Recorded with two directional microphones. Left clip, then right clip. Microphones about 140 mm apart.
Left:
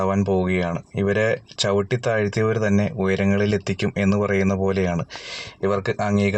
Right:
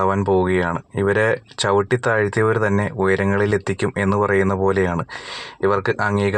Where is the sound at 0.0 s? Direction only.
10° right (ahead or behind).